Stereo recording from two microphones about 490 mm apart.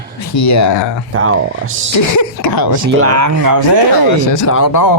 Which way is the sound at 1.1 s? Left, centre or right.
Right.